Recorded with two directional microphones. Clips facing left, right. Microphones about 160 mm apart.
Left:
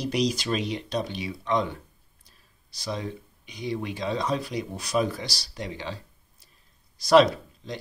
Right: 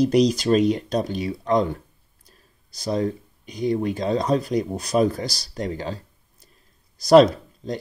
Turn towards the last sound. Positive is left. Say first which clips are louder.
# right 4 dB
turn(degrees=-40)  # may be behind; listen again after turning